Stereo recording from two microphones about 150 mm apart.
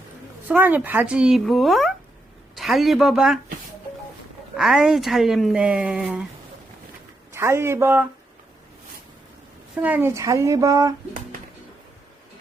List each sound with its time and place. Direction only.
0.4 s speech: 10° right (ahead or behind)
4.5 s speech: 5° right (ahead or behind)
7.3 s speech: 15° right (ahead or behind)
9.8 s a woman's voice: 15° right (ahead or behind)